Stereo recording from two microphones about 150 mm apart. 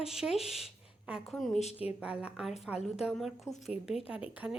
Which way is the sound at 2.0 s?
5° right (ahead or behind).